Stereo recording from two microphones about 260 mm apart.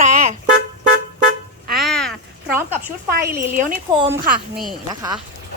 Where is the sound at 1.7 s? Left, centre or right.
Centre.